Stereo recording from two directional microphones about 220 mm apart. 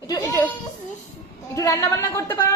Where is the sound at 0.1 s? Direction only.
15° left (ahead or behind).